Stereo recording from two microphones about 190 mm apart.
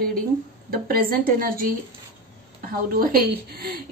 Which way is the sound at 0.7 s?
50° right (ahead or behind).